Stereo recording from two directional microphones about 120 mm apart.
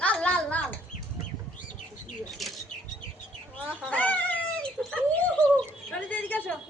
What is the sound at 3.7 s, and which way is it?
Cat, 10° left (ahead or behind).